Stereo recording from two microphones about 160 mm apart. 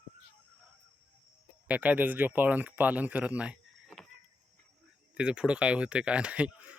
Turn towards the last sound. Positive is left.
turn(degrees=-10)  # may be behind; listen again after turning